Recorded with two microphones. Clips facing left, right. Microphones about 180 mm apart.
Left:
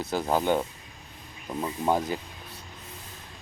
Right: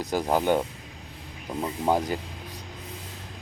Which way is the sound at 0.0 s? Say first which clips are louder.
Right 2 dB; 15° right (ahead or behind).